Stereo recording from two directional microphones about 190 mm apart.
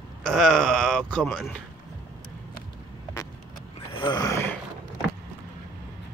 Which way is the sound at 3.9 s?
25° left (ahead or behind).